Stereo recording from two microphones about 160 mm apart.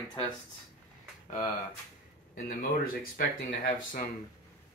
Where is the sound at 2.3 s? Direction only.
65° left (ahead or behind).